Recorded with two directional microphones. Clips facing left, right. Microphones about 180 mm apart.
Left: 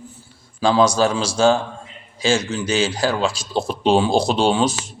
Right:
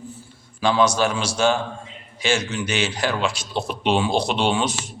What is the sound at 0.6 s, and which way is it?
A man's voice, 35° left (ahead or behind).